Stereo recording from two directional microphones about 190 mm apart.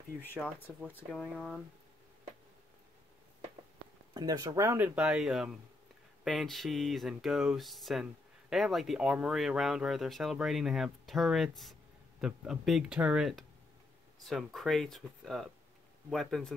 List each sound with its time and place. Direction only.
0.2 s speech: 10° left (ahead or behind)
4.1 s speech: 20° right (ahead or behind); by 16.5 s centre (ahead or behind)